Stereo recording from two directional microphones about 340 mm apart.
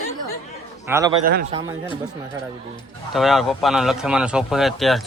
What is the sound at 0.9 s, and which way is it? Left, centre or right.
Speech, centre.